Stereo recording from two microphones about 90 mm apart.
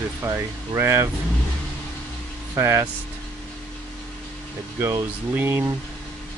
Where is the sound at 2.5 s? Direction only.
30° right (ahead or behind).